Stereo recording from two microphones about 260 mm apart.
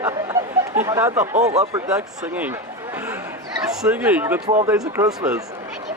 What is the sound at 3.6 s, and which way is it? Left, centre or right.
A man's voice, centre.